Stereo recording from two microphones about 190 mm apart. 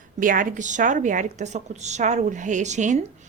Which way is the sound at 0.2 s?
45° right (ahead or behind).